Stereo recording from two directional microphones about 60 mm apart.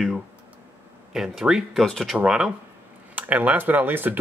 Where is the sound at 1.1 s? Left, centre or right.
Centre.